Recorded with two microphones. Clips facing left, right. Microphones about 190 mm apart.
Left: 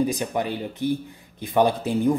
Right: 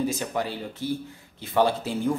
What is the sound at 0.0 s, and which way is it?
Speech, 15° left (ahead or behind).